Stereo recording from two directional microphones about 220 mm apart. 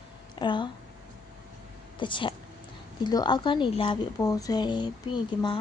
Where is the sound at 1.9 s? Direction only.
20° left (ahead or behind).